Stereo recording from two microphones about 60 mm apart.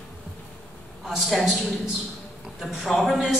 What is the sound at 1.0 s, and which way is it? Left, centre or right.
Speech, centre.